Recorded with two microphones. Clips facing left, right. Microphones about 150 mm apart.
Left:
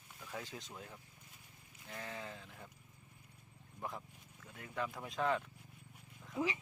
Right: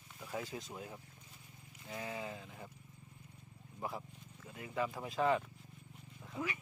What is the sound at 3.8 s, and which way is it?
Speech, 5° right (ahead or behind).